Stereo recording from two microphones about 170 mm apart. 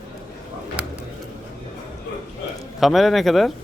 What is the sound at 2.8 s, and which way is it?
Speech, centre (ahead or behind).